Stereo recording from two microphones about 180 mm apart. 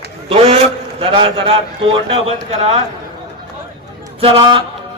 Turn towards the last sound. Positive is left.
turn(degrees=-30)  # may be behind; listen again after turning